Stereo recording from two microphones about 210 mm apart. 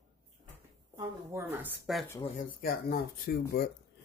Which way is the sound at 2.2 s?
40° left (ahead or behind).